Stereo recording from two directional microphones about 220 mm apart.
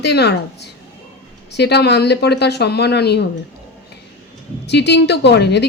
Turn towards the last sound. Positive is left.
turn(degrees=50)  # may be behind; listen again after turning